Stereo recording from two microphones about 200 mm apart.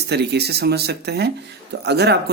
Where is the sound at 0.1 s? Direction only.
55° right (ahead or behind).